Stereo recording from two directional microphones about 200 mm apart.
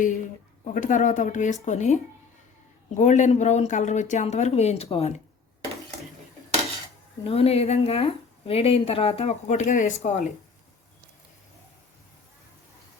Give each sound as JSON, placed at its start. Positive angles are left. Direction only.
{"t": 0.6, "sound": "a woman's voice", "side_deg": 40}
{"t": 7.3, "sound": "a woman's voice", "side_deg": 30}